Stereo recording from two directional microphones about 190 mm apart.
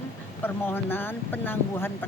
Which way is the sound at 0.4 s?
10° left (ahead or behind).